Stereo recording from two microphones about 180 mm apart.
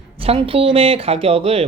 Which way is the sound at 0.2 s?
30° right (ahead or behind).